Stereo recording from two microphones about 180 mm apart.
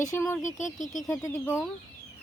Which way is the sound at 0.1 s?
15° left (ahead or behind).